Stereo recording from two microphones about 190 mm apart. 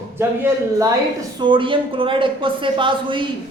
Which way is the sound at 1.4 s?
25° right (ahead or behind).